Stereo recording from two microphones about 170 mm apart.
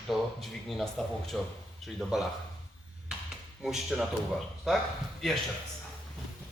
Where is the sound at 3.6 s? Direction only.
Centre (ahead or behind).